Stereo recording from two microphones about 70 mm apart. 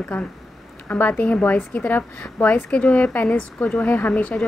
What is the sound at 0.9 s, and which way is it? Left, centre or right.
Speech, left.